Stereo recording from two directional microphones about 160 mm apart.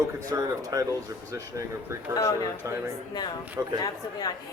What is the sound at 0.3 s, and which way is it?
Speech, 20° right (ahead or behind).